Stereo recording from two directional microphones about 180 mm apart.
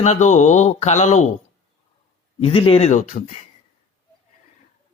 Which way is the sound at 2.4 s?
30° left (ahead or behind).